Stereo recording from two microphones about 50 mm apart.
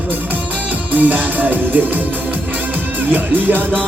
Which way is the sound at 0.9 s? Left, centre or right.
Right.